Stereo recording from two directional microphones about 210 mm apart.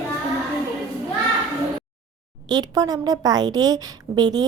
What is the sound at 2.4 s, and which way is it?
A woman's voice, 20° right (ahead or behind).